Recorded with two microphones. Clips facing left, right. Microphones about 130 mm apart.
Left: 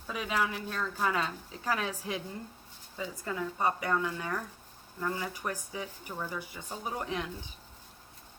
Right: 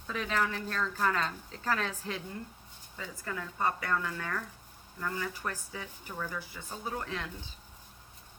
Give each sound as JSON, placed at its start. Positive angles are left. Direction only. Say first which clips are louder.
{"t": 0.1, "sound": "speech", "louder": "even", "side_deg": 10}